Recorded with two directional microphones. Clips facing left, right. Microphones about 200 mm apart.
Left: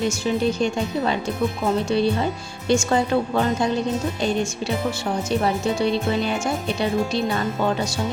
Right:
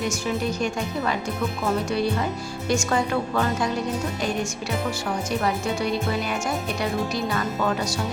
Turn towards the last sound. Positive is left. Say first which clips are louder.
# left 2 dB
turn(degrees=25)  # may be behind; listen again after turning